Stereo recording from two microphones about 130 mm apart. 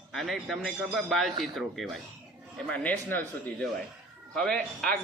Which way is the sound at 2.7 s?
10° left (ahead or behind).